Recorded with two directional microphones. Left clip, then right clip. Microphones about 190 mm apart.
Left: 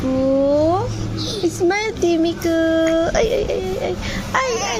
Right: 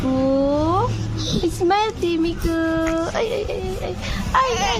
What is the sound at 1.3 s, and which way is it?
A child's voice, centre (ahead or behind).